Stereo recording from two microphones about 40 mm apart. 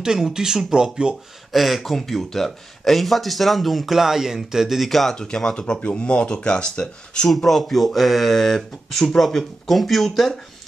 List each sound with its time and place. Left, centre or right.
0.0 s speech: centre
1.5 s speech: centre
4.8 s speech: centre
5.1 s speech: centre
5.8 s speech: left
7.2 s speech: centre